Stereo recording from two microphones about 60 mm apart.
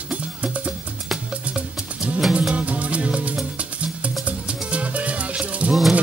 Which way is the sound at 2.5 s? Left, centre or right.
Right.